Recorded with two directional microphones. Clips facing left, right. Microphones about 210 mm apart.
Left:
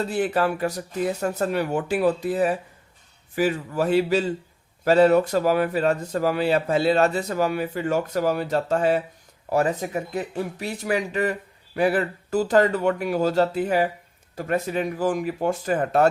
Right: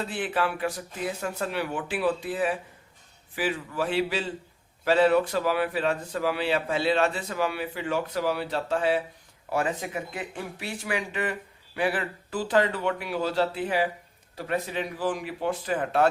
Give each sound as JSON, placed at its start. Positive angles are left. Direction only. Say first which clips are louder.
{"t": 0.1, "sound": "speech", "louder": "left 6 dB", "side_deg": 40}